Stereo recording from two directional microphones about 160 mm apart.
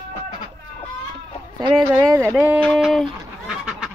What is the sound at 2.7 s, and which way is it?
Honk, centre (ahead or behind).